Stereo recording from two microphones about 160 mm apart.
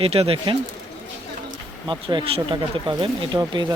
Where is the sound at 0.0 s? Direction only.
35° right (ahead or behind).